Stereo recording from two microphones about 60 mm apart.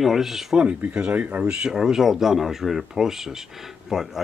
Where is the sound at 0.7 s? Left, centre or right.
Centre.